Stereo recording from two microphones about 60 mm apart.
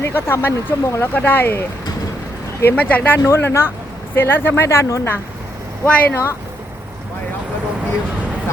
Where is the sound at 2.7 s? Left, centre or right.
Left.